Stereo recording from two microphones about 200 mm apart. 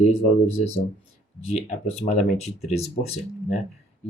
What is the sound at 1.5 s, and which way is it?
Speech, 30° left (ahead or behind).